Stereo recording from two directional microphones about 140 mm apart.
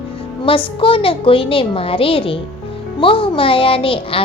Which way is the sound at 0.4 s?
40° left (ahead or behind).